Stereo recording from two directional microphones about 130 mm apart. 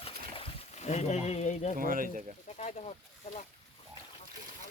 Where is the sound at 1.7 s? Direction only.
90° right.